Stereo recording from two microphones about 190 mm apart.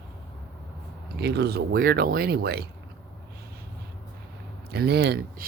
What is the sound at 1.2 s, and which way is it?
Speech, 60° right (ahead or behind).